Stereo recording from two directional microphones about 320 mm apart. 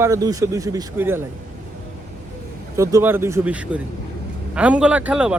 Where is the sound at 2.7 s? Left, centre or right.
Centre.